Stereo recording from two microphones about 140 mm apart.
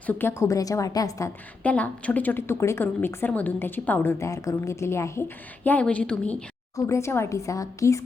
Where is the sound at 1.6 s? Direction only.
10° left (ahead or behind).